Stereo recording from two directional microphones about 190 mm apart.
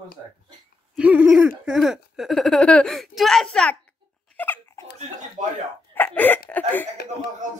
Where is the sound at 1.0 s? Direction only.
5° right (ahead or behind).